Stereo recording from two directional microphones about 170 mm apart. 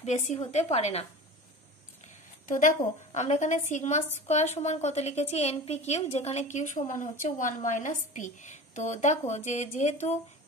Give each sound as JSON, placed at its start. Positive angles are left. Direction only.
{"t": 0.0, "sound": "a woman's voice", "side_deg": 45}
{"t": 2.4, "sound": "a woman's voice", "side_deg": 50}